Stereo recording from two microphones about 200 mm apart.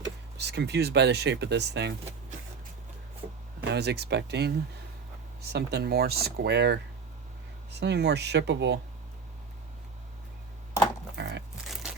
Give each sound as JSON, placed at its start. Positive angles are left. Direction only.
{"t": 0.3, "sound": "speech", "side_deg": -60}
{"t": 3.7, "sound": "speech", "side_deg": -55}
{"t": 7.8, "sound": "speech", "side_deg": -55}
{"t": 11.2, "sound": "pig", "side_deg": -60}